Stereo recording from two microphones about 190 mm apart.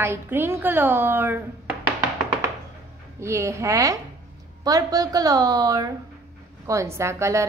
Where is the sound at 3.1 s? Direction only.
15° right (ahead or behind).